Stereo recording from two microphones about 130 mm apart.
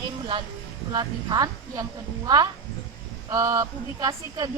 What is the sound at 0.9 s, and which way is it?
Speech, 30° right (ahead or behind).